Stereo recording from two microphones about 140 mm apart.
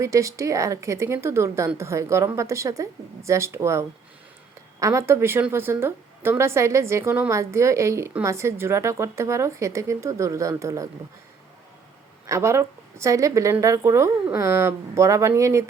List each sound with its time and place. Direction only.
0.0 s a woman's voice: 20° right (ahead or behind)
12.3 s a woman's voice: 20° right (ahead or behind)